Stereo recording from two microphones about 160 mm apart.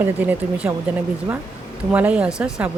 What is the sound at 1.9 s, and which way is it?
Speech, 10° right (ahead or behind).